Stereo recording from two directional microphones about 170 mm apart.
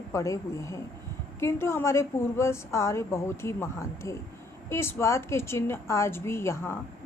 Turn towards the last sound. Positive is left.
turn(degrees=15)  # may be behind; listen again after turning